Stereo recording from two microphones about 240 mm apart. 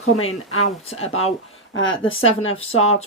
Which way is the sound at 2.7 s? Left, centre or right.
Left.